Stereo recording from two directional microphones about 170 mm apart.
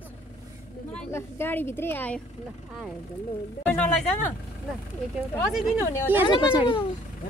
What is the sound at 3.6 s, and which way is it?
Speech, 5° left (ahead or behind).